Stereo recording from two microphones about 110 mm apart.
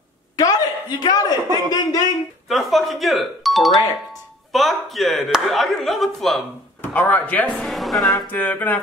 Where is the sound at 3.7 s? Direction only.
40° left (ahead or behind).